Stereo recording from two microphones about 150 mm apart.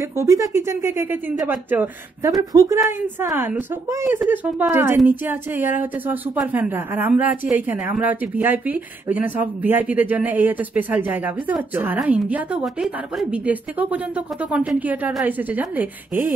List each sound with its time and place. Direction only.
0.0 s speech: 20° right (ahead or behind)
2.3 s a woman's voice: 25° right (ahead or behind)